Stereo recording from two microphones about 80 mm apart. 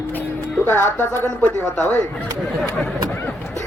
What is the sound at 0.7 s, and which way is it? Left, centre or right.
Speech, left.